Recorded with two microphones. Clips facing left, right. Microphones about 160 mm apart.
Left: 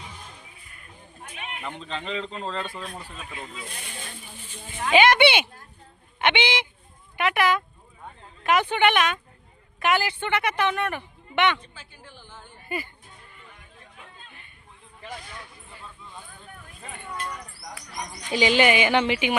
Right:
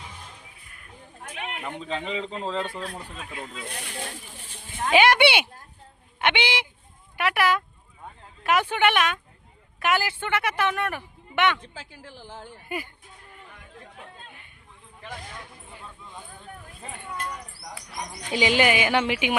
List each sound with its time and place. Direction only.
1.4 s a sound: 75° right (ahead or behind)
1.6 s speech: 10° right (ahead or behind)
2.9 s speech: centre (ahead or behind)
3.5 s speech: 65° right (ahead or behind)
4.9 s speech: 10° right (ahead or behind)
11.6 s a woman's voice: 90° right
12.6 s speech: 10° right (ahead or behind)
13.5 s chatter: 50° right (ahead or behind)
17.9 s speech: 10° right (ahead or behind)